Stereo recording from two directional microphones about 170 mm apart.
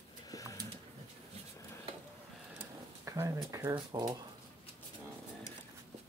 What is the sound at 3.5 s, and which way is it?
Speech, 25° right (ahead or behind).